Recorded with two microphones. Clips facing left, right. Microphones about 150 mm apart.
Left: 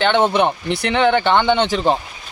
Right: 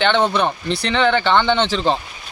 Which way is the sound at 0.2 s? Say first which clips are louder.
Left 2 dB; 20° left (ahead or behind).